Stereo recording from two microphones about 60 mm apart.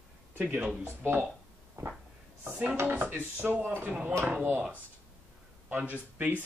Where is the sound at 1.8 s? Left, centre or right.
Right.